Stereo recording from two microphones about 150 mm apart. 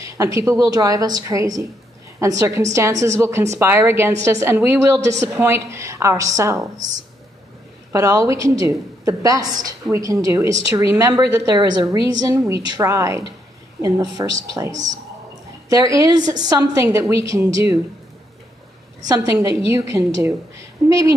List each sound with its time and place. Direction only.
0.0 s a woman's voice: 20° right (ahead or behind)
7.9 s a woman's voice: 20° right (ahead or behind)
19.3 s a woman's voice: 20° right (ahead or behind)